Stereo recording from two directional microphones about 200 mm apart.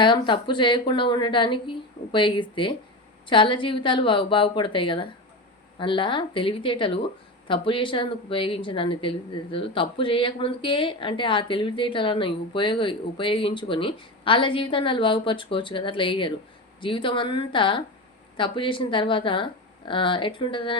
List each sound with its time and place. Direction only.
0.0 s speech: 25° left (ahead or behind)